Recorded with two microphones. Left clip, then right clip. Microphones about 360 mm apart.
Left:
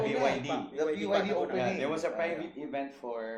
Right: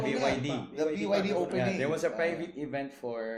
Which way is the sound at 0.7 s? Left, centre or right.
Right.